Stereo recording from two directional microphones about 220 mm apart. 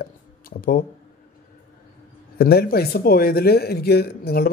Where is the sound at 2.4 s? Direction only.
45° left (ahead or behind).